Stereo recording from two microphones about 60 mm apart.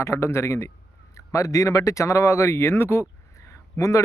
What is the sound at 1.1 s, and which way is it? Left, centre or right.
Speech, left.